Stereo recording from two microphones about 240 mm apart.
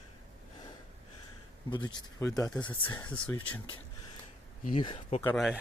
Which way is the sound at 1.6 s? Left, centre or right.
Centre.